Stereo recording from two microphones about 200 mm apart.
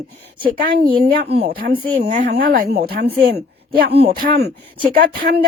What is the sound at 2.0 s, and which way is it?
A man's voice, 45° right (ahead or behind).